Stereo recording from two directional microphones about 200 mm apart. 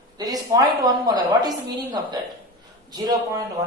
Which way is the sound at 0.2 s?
20° right (ahead or behind).